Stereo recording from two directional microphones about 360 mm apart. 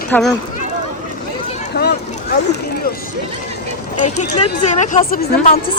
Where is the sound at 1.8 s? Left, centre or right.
Left.